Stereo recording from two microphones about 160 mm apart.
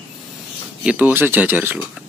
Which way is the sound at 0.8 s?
10° right (ahead or behind).